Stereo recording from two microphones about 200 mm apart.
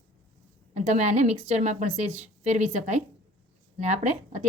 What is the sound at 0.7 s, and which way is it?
A woman's voice, 35° right (ahead or behind).